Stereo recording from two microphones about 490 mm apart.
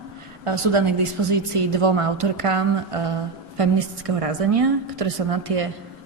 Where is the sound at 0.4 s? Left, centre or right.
Right.